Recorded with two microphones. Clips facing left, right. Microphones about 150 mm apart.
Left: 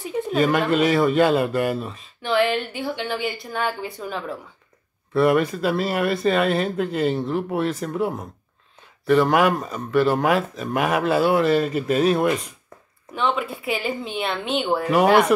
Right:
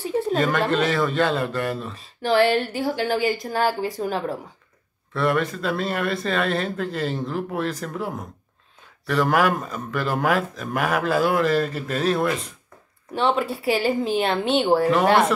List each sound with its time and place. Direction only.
0.4 s a man's voice: 5° left (ahead or behind)
2.0 s speech: 35° right (ahead or behind)
5.1 s speech: 5° left (ahead or behind)
13.1 s speech: 35° right (ahead or behind)
14.9 s a man's voice: 10° left (ahead or behind)